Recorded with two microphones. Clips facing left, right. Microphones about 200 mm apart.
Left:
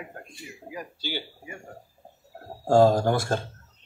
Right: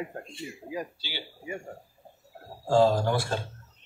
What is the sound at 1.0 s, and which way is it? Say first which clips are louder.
Speech: left 7 dB; 50° left (ahead or behind).